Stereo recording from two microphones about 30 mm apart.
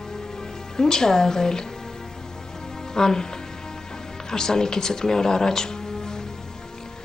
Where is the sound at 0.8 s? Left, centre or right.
Centre.